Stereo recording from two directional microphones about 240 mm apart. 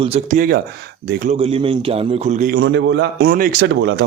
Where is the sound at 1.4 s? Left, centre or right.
Right.